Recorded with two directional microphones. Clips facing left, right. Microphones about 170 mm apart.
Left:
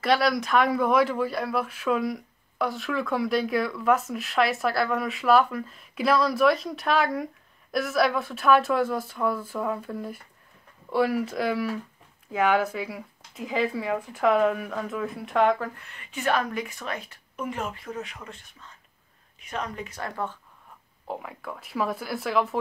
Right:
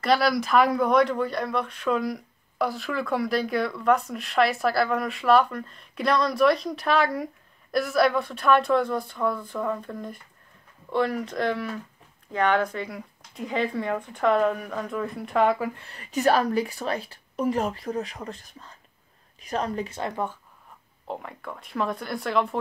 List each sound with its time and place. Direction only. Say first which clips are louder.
0.0 s speech: right 1 dB; centre (ahead or behind)
15.8 s a woman's voice: right 7 dB; 35° right (ahead or behind)
20.0 s speech: left 1 dB; 15° right (ahead or behind)
21.1 s speech: even; centre (ahead or behind)